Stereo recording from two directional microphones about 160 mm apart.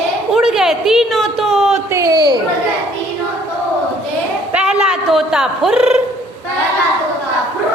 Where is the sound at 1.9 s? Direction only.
20° right (ahead or behind).